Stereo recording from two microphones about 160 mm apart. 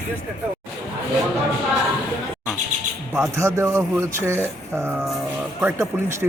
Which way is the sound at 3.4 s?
20° right (ahead or behind).